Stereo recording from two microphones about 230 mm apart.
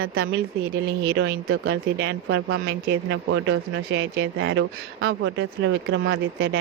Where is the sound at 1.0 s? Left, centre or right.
Right.